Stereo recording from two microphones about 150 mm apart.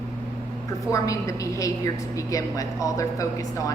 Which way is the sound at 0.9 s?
20° left (ahead or behind).